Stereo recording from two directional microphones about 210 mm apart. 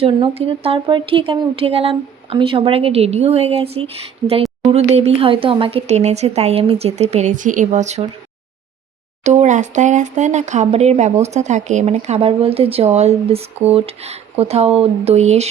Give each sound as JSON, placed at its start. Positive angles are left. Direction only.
{"t": 0.0, "sound": "speech", "side_deg": -25}
{"t": 9.2, "sound": "speech", "side_deg": -35}